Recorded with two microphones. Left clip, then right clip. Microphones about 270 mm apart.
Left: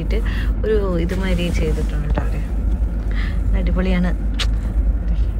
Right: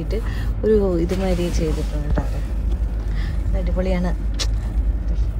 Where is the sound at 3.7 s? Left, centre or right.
Centre.